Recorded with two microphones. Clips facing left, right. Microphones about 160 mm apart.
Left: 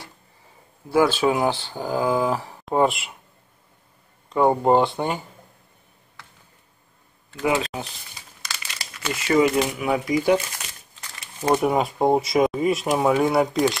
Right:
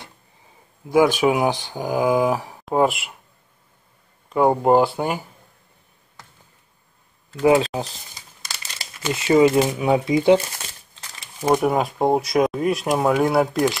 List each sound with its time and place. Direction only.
0.8 s speech: 15° right (ahead or behind)
2.6 s speech: centre (ahead or behind)
4.3 s speech: 5° right (ahead or behind)
7.4 s speech: 30° right (ahead or behind)
9.1 s speech: 25° right (ahead or behind)
11.4 s speech: centre (ahead or behind)